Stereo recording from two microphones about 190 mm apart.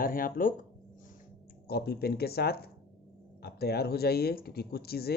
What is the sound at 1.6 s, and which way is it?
Speech, 55° left (ahead or behind).